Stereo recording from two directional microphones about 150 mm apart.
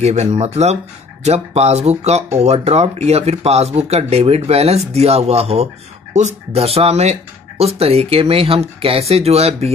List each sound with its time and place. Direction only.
0.0 s speech: 45° right (ahead or behind)